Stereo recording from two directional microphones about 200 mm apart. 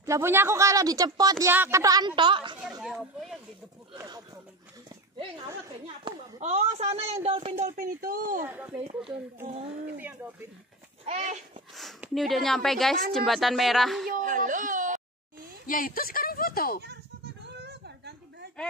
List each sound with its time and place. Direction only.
0.0 s a woman's voice: 15° right (ahead or behind)
2.8 s a woman's voice: centre (ahead or behind)
3.9 s a woman's voice: 20° right (ahead or behind)
6.4 s speech: 30° right (ahead or behind)
8.7 s a woman's voice: 25° right (ahead or behind)
11.1 s speech: 30° right (ahead or behind)
11.7 s a woman's voice: centre (ahead or behind)
14.0 s speech: 45° right (ahead or behind)
15.6 s speech: 45° left (ahead or behind)
17.6 s a sound: 55° right (ahead or behind)